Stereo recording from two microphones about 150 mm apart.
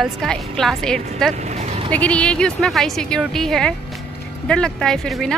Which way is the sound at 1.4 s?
50° right (ahead or behind).